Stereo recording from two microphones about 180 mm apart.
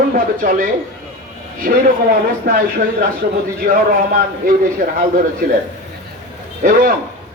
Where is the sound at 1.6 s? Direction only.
50° right (ahead or behind).